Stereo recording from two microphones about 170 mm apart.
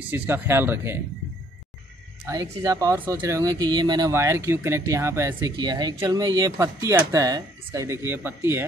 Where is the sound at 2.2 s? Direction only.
20° right (ahead or behind).